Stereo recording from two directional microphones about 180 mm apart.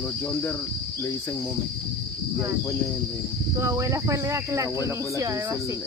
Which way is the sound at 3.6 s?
15° right (ahead or behind).